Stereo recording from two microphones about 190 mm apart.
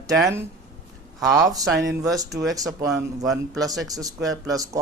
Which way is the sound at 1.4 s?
20° right (ahead or behind).